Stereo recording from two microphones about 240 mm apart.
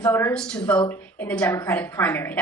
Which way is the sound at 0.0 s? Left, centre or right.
Centre.